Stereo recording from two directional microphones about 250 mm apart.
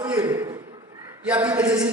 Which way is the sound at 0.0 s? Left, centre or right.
Centre.